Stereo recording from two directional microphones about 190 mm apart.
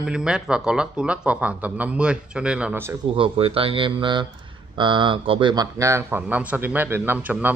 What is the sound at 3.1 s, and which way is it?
Speech, 30° right (ahead or behind).